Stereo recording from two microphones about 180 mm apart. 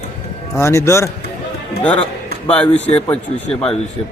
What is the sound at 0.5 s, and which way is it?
Speech, 15° left (ahead or behind).